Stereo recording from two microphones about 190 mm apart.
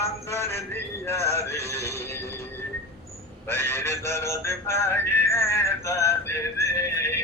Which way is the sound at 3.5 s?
15° left (ahead or behind).